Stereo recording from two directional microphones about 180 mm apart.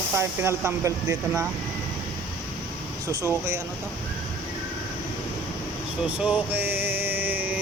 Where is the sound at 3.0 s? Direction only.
15° right (ahead or behind).